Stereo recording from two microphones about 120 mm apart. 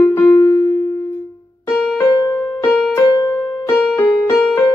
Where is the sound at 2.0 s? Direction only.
20° left (ahead or behind).